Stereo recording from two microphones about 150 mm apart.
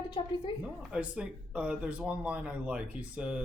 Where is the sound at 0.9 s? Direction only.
10° right (ahead or behind).